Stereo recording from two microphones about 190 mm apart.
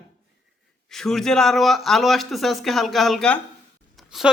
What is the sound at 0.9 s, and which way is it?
Speech, centre (ahead or behind).